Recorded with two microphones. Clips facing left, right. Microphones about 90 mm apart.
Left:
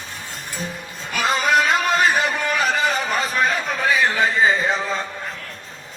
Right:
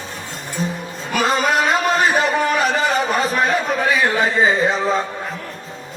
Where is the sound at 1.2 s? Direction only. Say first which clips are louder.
Even; 40° right (ahead or behind).